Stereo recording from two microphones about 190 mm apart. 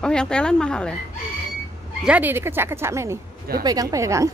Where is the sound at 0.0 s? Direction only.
5° left (ahead or behind).